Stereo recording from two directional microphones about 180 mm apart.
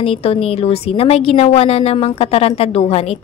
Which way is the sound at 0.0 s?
30° left (ahead or behind).